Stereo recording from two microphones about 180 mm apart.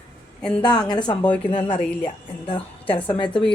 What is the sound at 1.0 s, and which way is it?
Speech, 5° left (ahead or behind).